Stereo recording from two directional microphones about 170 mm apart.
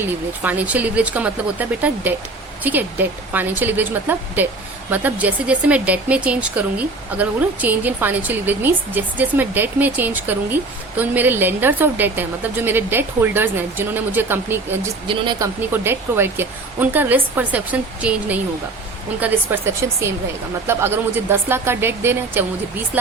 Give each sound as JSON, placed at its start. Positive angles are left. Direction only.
{"t": 0.0, "sound": "speech", "side_deg": -10}
{"t": 15.0, "sound": "speech", "side_deg": -30}
{"t": 15.7, "sound": "speech", "side_deg": -15}